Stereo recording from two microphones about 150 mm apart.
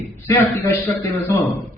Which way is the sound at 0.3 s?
15° left (ahead or behind).